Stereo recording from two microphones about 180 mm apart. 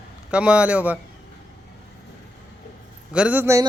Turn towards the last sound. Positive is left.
turn(degrees=-15)  # may be behind; listen again after turning